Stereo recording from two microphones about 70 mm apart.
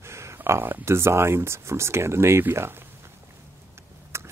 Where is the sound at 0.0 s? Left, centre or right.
Right.